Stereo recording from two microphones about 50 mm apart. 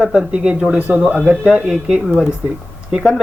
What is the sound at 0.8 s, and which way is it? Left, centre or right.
Speech, right.